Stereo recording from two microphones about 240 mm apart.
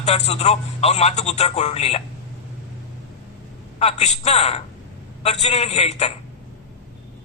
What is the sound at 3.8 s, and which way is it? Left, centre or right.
A man's voice, left.